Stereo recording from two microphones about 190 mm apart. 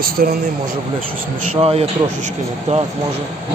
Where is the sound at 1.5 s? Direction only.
30° right (ahead or behind).